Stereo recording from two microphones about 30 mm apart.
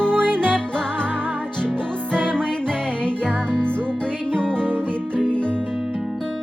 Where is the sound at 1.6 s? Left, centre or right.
Left.